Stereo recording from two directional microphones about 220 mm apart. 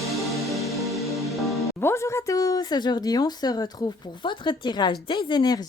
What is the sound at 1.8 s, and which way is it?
Speech, 10° left (ahead or behind).